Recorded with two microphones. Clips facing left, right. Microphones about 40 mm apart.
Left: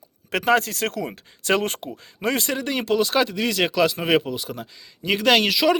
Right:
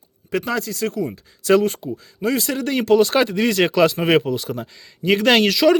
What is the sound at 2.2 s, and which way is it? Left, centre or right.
Speech, left.